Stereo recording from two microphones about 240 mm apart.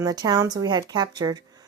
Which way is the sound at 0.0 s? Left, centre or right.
Centre.